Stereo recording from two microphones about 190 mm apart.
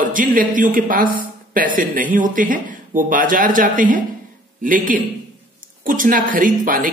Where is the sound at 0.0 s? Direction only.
45° right (ahead or behind).